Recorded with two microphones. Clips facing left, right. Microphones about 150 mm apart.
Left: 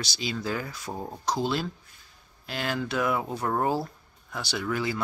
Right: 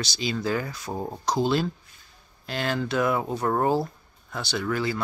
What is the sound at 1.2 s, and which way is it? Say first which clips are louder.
Speech: right 4 dB; centre (ahead or behind).